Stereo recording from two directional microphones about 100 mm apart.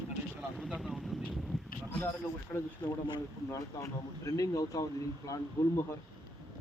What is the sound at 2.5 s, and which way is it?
Speech, 25° left (ahead or behind).